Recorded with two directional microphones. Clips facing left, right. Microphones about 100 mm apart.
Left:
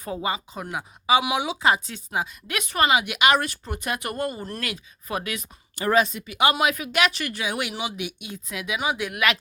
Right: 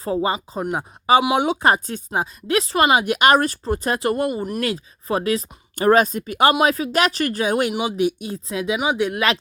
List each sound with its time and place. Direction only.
0.0 s speech: 30° right (ahead or behind); by 2.2 s 45° right (ahead or behind)
2.5 s speech: 30° right (ahead or behind)
2.9 s speech: 45° right (ahead or behind)
5.9 s speech: 45° right (ahead or behind)
6.6 s speech: 30° right (ahead or behind)
7.7 s speech: 30° right (ahead or behind)